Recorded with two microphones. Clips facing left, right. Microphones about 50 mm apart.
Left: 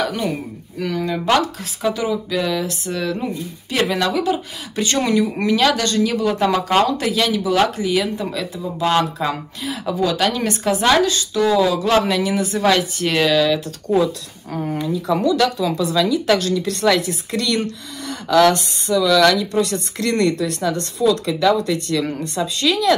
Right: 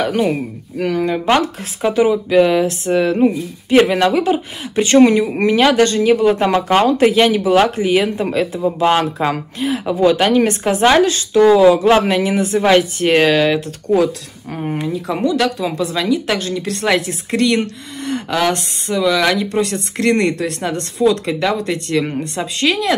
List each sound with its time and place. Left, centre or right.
0.0 s speech: right
19.0 s speech: centre
19.3 s speech: right